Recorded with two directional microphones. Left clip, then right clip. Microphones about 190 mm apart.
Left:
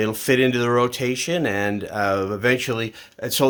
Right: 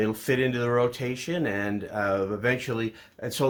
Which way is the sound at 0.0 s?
55° left (ahead or behind).